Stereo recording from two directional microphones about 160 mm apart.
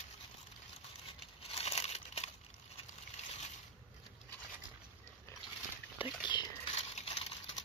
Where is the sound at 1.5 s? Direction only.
40° left (ahead or behind).